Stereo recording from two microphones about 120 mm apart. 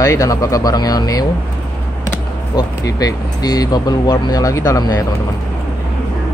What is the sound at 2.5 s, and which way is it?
Speech, 30° left (ahead or behind).